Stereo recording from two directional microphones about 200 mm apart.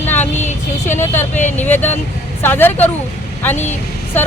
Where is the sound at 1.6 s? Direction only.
10° left (ahead or behind).